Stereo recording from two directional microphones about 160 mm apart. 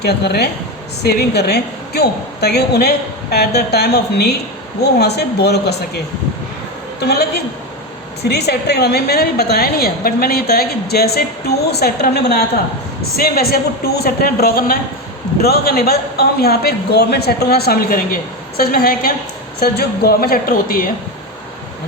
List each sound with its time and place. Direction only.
0.0 s a woman's voice: 90° left
7.0 s a woman's voice: 90° left
13.1 s a man's voice: 70° left (ahead or behind)
19.5 s a man's voice: 75° left (ahead or behind)